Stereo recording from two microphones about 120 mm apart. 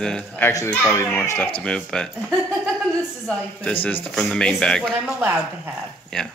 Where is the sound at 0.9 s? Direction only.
20° left (ahead or behind).